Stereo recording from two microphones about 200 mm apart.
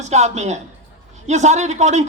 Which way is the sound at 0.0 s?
35° right (ahead or behind).